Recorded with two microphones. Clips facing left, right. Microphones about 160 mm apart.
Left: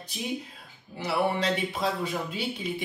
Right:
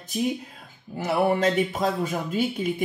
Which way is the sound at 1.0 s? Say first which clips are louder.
Right 5 dB; 50° right (ahead or behind).